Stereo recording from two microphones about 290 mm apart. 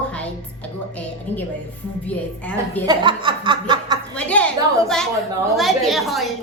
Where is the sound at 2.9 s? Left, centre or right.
Centre.